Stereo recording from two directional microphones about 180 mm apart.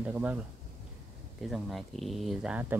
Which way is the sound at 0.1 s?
10° right (ahead or behind).